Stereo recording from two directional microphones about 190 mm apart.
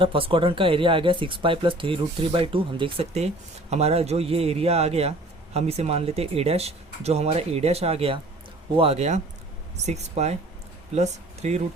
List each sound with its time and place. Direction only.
0.0 s speech: 30° right (ahead or behind)